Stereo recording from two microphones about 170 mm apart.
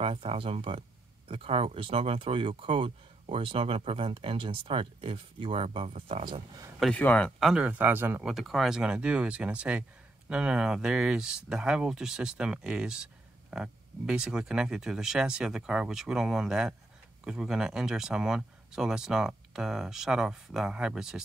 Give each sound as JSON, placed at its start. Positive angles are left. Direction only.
{"t": 0.0, "sound": "speech", "side_deg": -35}
{"t": 6.8, "sound": "speech", "side_deg": 10}